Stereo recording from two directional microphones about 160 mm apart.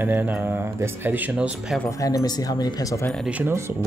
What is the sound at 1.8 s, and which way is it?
Speech, 20° left (ahead or behind).